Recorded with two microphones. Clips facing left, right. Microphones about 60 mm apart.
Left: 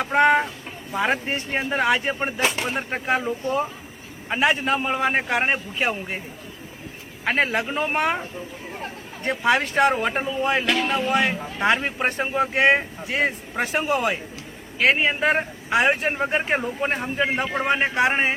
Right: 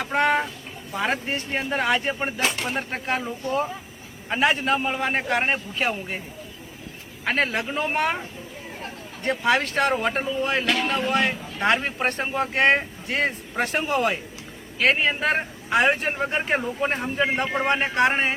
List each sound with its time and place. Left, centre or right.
0.0 s a sound: centre
1.1 s speech: left
1.7 s speech: centre
7.3 s speech: centre
9.2 s speech: centre